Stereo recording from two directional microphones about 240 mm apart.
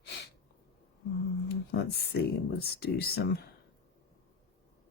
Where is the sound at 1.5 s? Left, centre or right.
Left.